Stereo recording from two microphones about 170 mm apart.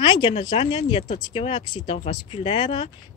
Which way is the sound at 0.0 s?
30° left (ahead or behind).